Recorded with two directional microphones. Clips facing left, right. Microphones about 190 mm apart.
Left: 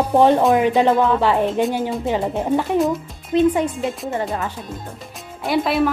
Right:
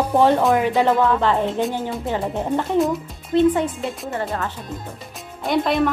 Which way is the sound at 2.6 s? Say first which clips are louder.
Right 1 dB; centre (ahead or behind).